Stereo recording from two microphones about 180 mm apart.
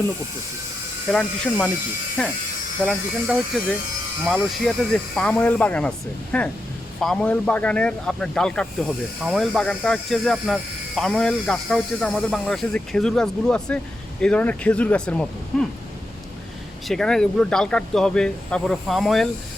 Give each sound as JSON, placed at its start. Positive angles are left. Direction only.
{"t": 1.1, "sound": "speech", "side_deg": 5}
{"t": 16.9, "sound": "speech", "side_deg": 5}